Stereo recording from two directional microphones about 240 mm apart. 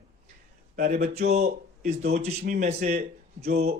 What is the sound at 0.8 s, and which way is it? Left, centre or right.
A man's voice, right.